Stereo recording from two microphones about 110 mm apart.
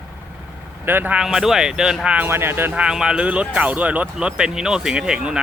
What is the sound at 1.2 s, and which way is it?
Speech, 5° right (ahead or behind).